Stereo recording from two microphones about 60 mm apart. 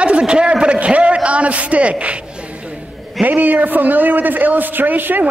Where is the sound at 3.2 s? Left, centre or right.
Right.